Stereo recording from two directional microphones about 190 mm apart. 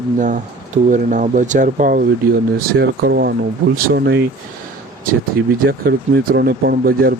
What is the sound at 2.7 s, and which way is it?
Speech, 60° right (ahead or behind).